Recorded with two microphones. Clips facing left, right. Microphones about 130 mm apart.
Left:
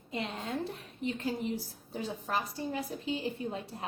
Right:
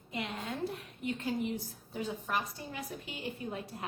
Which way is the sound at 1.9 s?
30° left (ahead or behind).